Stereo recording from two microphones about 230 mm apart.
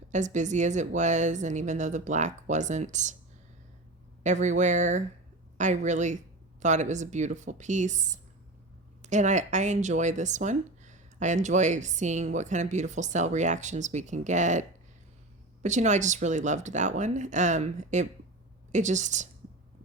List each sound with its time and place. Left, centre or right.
0.1 s speech: right
4.2 s speech: right